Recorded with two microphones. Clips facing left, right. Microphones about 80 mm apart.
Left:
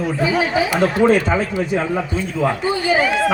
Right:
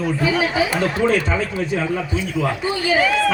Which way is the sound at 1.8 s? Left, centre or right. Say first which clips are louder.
Left 1 dB; left.